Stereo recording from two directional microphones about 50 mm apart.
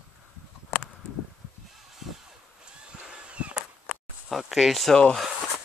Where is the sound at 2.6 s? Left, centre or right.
Right.